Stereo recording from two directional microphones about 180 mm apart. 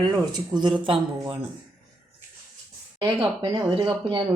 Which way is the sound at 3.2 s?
30° right (ahead or behind).